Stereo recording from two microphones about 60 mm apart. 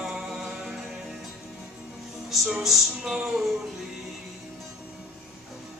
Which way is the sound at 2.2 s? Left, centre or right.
Centre.